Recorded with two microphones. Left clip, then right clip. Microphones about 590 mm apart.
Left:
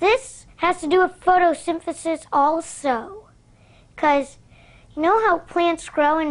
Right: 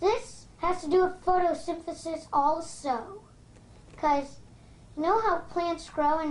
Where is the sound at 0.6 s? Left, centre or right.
Left.